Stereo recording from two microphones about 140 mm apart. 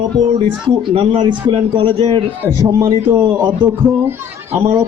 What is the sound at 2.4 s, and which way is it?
Speech, 20° right (ahead or behind).